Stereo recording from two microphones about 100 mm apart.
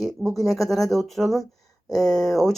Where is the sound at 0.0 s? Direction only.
Centre (ahead or behind).